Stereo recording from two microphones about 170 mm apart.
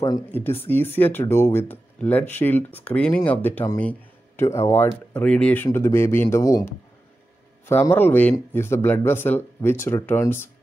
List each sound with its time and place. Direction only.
0.0 s speech: 15° left (ahead or behind)